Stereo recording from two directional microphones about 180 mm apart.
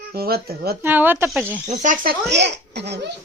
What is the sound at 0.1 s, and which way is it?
Speech, 60° right (ahead or behind).